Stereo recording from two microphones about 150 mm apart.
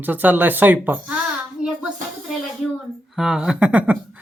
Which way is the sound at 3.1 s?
5° right (ahead or behind).